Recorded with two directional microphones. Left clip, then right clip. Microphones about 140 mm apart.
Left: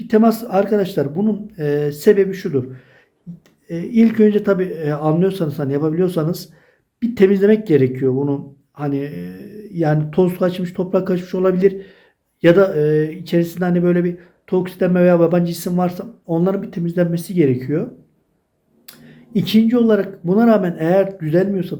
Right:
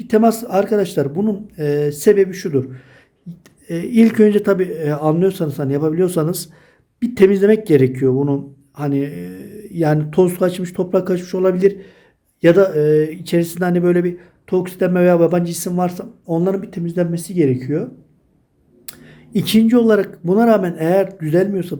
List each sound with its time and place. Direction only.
0.0 s speech: 30° right (ahead or behind)
1.6 s speech: 25° right (ahead or behind)
3.3 s a sound: 50° right (ahead or behind)
3.7 s speech: 50° right (ahead or behind); by 17.8 s 20° right (ahead or behind)
18.9 s speech: 40° right (ahead or behind)